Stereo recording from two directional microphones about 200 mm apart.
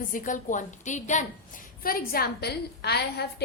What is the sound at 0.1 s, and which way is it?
A woman's voice, 40° left (ahead or behind).